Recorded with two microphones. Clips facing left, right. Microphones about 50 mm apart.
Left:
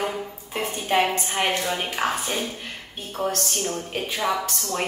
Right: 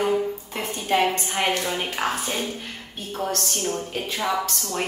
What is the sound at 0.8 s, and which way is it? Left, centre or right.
A woman's voice, centre.